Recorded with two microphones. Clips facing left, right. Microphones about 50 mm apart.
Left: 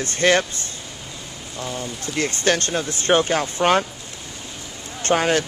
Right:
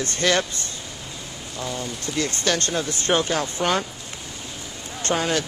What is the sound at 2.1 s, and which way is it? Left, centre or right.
Speech, left.